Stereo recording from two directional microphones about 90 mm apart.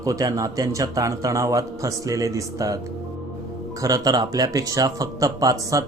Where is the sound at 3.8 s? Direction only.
45° right (ahead or behind).